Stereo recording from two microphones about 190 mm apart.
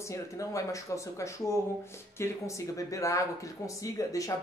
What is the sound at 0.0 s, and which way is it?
Speech, 15° left (ahead or behind).